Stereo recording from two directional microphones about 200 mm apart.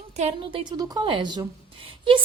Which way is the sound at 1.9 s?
25° right (ahead or behind).